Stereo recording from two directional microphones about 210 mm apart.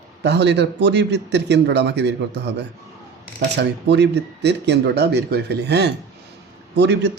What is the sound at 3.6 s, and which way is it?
A man's voice, 55° right (ahead or behind).